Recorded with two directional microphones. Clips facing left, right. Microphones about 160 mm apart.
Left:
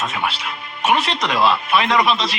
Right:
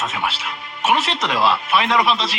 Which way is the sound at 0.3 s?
60° left (ahead or behind).